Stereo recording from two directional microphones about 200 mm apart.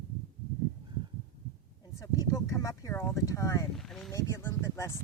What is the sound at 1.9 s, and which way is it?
Speech, 15° left (ahead or behind).